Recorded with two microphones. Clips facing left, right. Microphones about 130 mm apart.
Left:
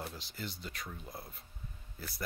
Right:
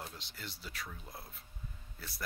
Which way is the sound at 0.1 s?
Centre (ahead or behind).